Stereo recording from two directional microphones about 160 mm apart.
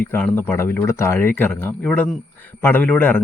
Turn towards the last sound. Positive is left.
turn(degrees=10)  # may be behind; listen again after turning